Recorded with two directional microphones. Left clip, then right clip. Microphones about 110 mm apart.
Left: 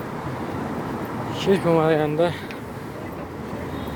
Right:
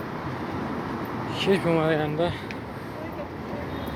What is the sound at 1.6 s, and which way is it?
Speech, 45° left (ahead or behind).